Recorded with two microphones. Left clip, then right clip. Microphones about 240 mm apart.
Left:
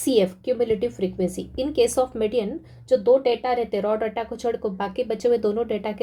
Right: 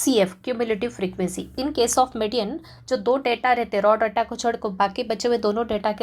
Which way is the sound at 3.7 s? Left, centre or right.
Centre.